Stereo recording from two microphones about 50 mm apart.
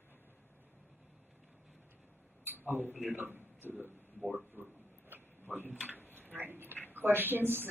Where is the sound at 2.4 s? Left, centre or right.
Right.